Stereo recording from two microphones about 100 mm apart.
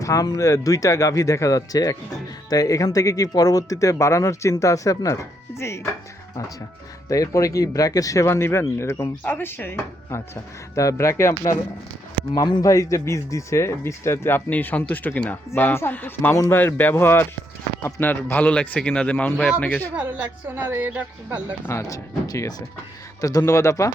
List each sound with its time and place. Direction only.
0.0 s speech: 35° left (ahead or behind)
7.1 s a man's voice: 35° left (ahead or behind); by 19.9 s 20° left (ahead or behind)
20.0 s a woman's voice: 15° right (ahead or behind)
21.7 s speech: 35° left (ahead or behind)